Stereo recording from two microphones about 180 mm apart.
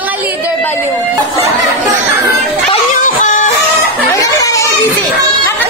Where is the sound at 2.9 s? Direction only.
50° left (ahead or behind).